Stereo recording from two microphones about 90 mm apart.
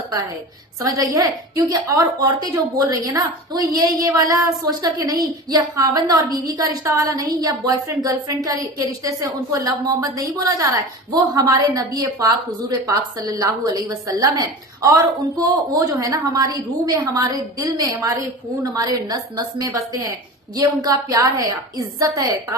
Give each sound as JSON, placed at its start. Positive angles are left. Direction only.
{"t": 0.8, "sound": "a woman's voice", "side_deg": -45}